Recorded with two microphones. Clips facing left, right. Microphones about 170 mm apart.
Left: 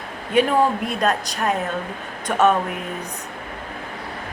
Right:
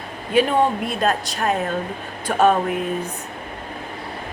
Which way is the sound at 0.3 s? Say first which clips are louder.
Even; 30° right (ahead or behind).